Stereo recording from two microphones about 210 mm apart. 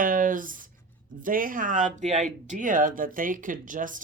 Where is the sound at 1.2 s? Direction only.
40° right (ahead or behind).